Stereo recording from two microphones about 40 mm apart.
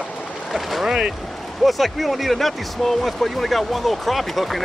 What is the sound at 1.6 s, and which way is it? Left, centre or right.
Speech, centre.